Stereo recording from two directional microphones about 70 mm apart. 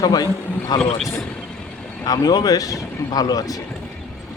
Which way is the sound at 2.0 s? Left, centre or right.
Left.